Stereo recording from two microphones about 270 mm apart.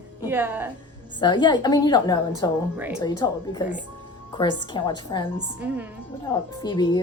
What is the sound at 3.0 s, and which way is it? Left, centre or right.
A woman's voice, centre.